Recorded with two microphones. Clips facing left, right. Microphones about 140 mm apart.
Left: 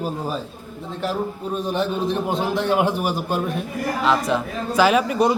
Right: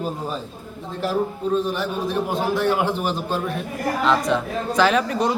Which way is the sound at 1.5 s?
20° left (ahead or behind).